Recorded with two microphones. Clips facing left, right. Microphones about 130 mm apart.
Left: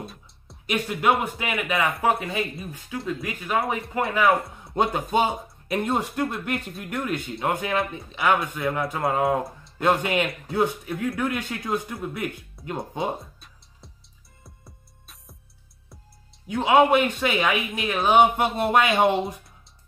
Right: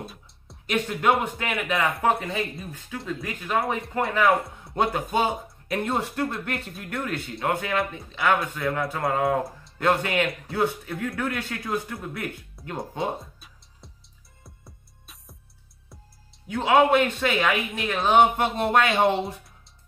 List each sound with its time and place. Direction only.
0.0 s speech: centre (ahead or behind)
5.1 s speech: 20° left (ahead or behind)
12.6 s music: centre (ahead or behind)
16.4 s speech: 15° left (ahead or behind)